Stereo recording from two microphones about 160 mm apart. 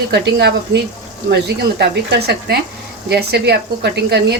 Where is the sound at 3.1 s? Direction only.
90° right.